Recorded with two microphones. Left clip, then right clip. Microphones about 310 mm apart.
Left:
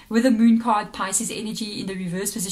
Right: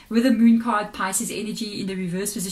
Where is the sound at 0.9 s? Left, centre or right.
Centre.